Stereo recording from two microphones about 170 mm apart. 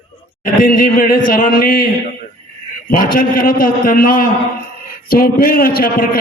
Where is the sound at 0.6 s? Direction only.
55° left (ahead or behind).